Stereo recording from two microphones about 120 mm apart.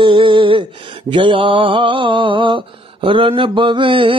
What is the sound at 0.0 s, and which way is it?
Mantra, 45° right (ahead or behind).